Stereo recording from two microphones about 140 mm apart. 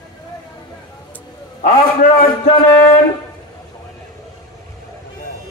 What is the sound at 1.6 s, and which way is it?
Speech, 90° left.